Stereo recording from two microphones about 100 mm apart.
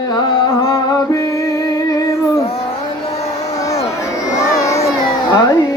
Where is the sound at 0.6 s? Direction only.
30° left (ahead or behind).